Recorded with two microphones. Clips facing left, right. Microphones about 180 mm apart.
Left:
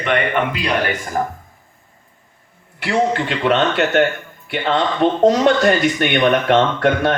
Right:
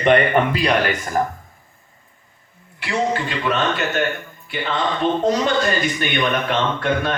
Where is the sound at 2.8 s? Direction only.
70° left (ahead or behind).